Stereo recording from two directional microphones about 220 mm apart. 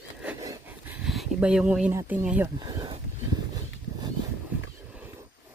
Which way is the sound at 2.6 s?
20° right (ahead or behind).